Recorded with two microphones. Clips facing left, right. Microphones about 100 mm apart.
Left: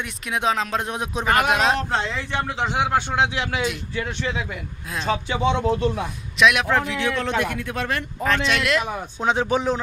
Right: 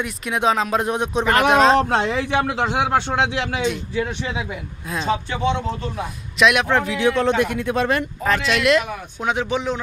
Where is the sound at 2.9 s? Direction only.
30° right (ahead or behind).